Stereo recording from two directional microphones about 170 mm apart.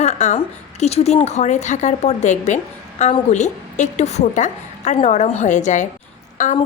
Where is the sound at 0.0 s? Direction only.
40° left (ahead or behind).